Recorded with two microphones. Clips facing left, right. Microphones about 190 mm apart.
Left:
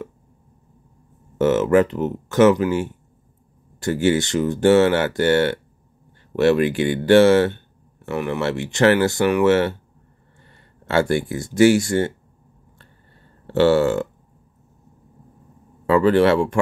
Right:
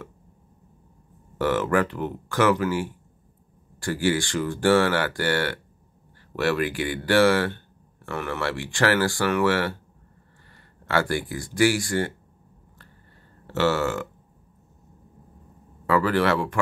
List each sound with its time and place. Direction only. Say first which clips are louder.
1.4 s speech: left 7 dB; 20° left (ahead or behind)
10.9 s speech: left 5 dB; 25° left (ahead or behind)
13.5 s speech: left 7 dB; 30° left (ahead or behind)
15.9 s speech: left 6 dB; 25° left (ahead or behind)